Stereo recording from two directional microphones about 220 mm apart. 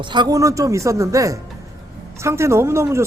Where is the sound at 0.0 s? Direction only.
20° right (ahead or behind).